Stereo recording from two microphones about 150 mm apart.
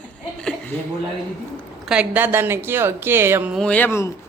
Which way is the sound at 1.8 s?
10° right (ahead or behind).